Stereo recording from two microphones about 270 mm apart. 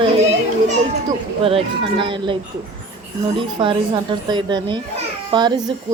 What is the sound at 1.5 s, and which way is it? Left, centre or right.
Speech, centre.